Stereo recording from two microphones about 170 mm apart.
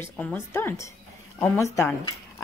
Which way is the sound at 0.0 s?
10° left (ahead or behind).